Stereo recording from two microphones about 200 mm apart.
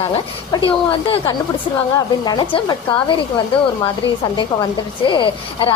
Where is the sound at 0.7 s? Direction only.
25° left (ahead or behind).